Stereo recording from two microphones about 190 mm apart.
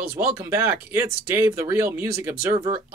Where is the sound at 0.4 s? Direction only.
15° right (ahead or behind).